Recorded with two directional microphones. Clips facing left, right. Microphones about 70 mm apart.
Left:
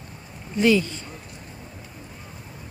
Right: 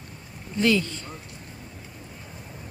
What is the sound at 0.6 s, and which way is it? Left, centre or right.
Speech, centre.